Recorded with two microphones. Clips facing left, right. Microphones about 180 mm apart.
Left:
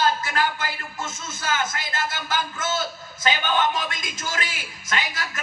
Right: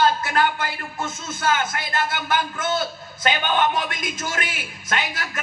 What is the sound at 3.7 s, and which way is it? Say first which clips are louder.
A man's voice: right 3 dB; 60° right (ahead or behind).